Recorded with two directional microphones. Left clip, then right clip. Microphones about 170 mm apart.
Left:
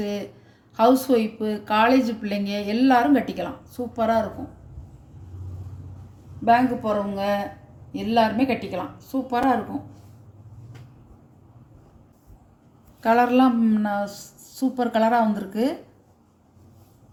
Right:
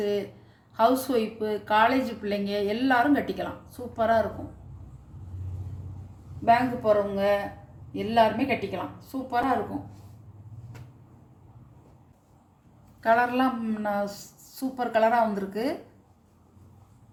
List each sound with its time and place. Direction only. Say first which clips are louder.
0.0 s a sound: right 2 dB; 55° left (ahead or behind)
0.8 s speech: left 4 dB; 55° left (ahead or behind)
6.4 s speech: left 3 dB; 55° left (ahead or behind)
13.0 s a woman's voice: left 4 dB; 50° left (ahead or behind)